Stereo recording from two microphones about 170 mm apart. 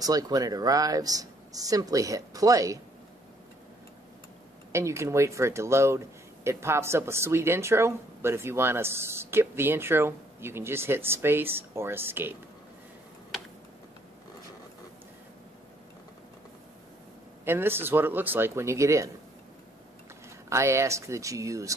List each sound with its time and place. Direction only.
0.0 s speech: 20° right (ahead or behind)
4.7 s speech: 15° right (ahead or behind)
17.5 s speech: 15° right (ahead or behind)
20.4 s speech: 15° right (ahead or behind)